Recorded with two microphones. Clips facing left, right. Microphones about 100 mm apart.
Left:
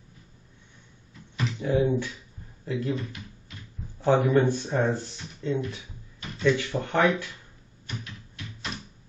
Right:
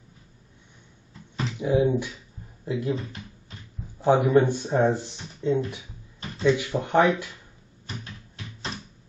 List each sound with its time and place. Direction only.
1.6 s speech: 15° right (ahead or behind)
2.9 s speech: 30° right (ahead or behind)
4.0 s speech: 15° right (ahead or behind)